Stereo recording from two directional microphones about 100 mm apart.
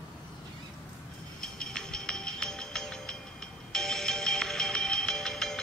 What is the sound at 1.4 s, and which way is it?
Music, 5° left (ahead or behind).